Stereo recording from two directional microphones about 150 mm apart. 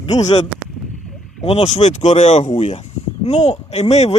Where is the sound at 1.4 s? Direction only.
45° left (ahead or behind).